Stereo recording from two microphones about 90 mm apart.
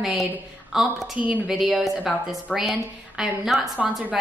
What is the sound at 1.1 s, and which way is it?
Speech, 15° right (ahead or behind).